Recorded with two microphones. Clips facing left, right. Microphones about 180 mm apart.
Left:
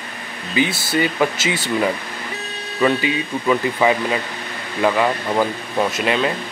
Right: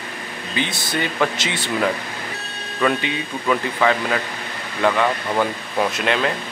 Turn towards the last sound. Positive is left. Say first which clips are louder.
# left 1 dB
turn(degrees=0)  # may be behind; listen again after turning